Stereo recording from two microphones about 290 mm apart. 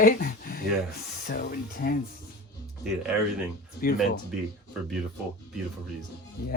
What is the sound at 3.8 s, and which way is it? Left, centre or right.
Speech, left.